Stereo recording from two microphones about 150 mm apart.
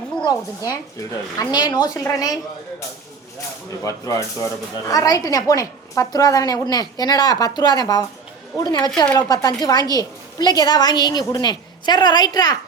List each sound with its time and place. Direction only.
0.3 s a woman's voice: 25° left (ahead or behind)
3.8 s a woman's voice: 20° left (ahead or behind)